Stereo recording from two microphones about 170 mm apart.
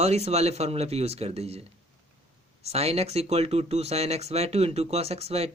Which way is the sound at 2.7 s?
35° right (ahead or behind).